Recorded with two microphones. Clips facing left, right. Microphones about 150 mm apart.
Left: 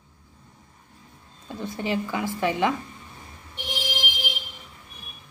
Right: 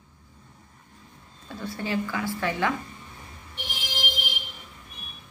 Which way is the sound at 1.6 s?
20° left (ahead or behind).